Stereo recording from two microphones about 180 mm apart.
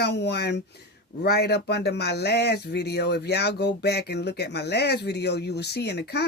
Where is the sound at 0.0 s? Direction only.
70° left (ahead or behind).